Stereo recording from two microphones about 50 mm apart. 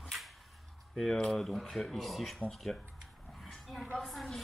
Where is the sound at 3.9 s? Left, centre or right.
Centre.